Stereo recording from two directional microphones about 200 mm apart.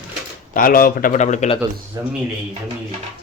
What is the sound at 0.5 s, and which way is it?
Speech, 45° left (ahead or behind).